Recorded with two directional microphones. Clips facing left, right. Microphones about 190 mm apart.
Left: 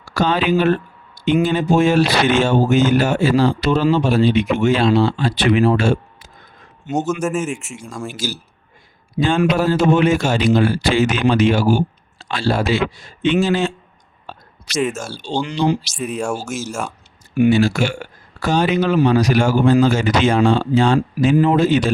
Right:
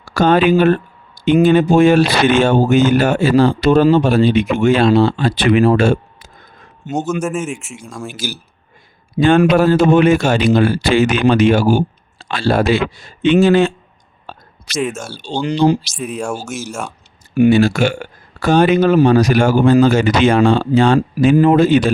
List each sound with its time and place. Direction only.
0.0 s speech: 50° right (ahead or behind)
6.9 s speech: centre (ahead or behind)
8.1 s speech: 60° right (ahead or behind)
9.6 s speech: 60° right (ahead or behind)
14.8 s speech: centre (ahead or behind)
15.4 s speech: 35° right (ahead or behind)
15.9 s speech: centre (ahead or behind)
17.5 s speech: 60° right (ahead or behind)